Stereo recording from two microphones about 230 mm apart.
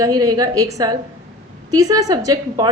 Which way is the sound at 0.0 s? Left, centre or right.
Centre.